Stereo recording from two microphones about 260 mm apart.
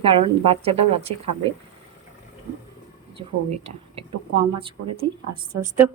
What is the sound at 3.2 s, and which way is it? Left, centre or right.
Speech, right.